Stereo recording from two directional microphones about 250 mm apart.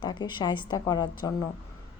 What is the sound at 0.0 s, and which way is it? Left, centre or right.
Speech, centre.